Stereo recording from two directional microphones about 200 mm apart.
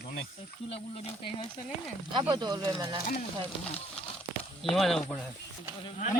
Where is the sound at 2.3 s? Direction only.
20° right (ahead or behind).